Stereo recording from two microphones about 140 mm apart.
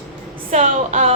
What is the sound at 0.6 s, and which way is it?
Speech, 70° right (ahead or behind).